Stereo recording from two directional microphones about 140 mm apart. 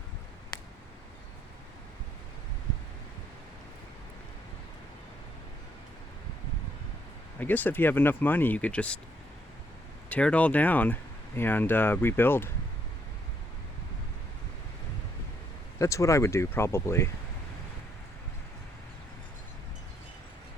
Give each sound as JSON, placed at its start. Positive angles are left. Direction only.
{"t": 0.5, "sound": "a sound", "side_deg": 30}
{"t": 7.3, "sound": "speech", "side_deg": 15}
{"t": 10.1, "sound": "speech", "side_deg": 10}
{"t": 15.8, "sound": "speech", "side_deg": 20}